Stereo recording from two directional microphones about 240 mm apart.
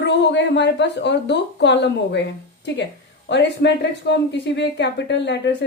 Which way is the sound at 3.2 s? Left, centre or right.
Left.